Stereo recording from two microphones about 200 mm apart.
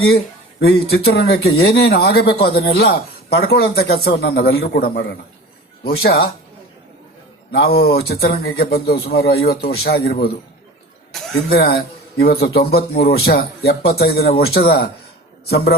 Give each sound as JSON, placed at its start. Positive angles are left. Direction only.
{"t": 0.6, "sound": "speech", "side_deg": 50}
{"t": 7.5, "sound": "speech", "side_deg": 50}
{"t": 11.4, "sound": "speech", "side_deg": 50}